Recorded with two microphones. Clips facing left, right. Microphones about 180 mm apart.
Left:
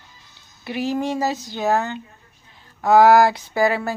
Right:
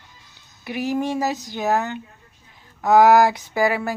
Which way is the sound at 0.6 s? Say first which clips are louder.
Even; 15° right (ahead or behind).